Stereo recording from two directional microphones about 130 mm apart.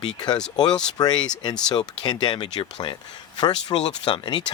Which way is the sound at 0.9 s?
30° left (ahead or behind).